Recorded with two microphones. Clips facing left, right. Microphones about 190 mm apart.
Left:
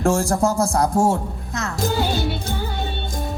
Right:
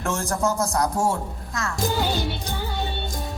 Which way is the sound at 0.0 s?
30° left (ahead or behind).